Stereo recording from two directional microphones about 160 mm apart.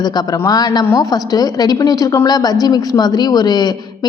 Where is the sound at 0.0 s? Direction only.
25° left (ahead or behind).